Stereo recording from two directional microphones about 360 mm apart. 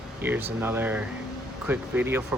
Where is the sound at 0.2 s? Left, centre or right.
Centre.